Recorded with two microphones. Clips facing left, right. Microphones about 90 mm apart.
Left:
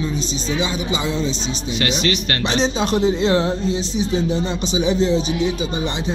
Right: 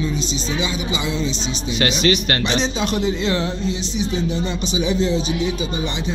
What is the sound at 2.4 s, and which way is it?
Speech, 35° left (ahead or behind).